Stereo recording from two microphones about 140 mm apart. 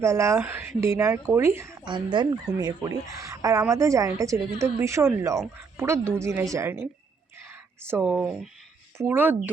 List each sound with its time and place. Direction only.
0.0 s speech: 20° right (ahead or behind)
1.8 s a woman's voice: 30° right (ahead or behind)
7.5 s a sound: 15° right (ahead or behind)
8.0 s speech: 10° right (ahead or behind)